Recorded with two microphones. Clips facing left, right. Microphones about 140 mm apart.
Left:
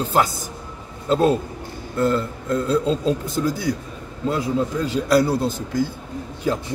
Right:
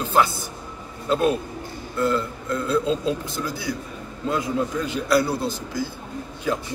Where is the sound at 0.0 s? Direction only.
35° left (ahead or behind).